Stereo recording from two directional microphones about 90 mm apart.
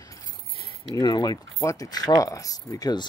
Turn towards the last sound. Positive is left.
turn(degrees=45)  # may be behind; listen again after turning